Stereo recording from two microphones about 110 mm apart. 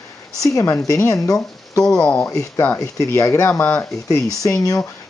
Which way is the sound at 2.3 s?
25° left (ahead or behind).